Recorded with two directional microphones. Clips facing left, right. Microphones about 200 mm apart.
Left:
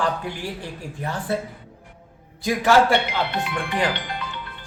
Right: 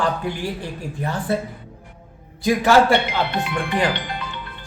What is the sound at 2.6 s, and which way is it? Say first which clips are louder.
Speech: right 1 dB; 40° right (ahead or behind).